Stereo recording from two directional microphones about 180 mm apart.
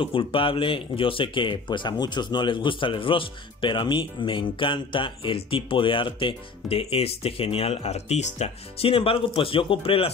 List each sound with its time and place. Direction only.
0.0 s speech: 30° left (ahead or behind)